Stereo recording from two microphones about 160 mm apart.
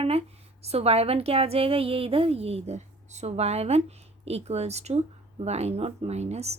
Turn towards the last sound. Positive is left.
turn(degrees=-40)  # may be behind; listen again after turning